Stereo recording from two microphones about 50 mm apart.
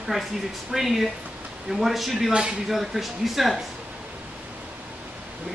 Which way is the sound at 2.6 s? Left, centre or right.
Centre.